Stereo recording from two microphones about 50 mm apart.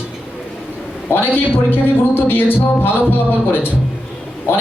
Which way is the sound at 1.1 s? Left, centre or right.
Left.